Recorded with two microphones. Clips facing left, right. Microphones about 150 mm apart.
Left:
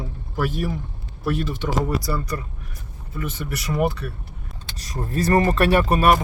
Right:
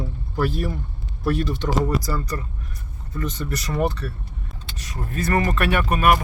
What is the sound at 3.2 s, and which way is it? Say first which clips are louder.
Speech: right 1 dB; 10° left (ahead or behind).